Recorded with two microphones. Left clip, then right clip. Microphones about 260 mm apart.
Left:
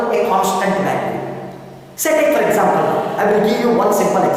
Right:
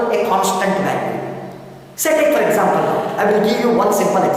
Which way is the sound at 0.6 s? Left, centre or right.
Centre.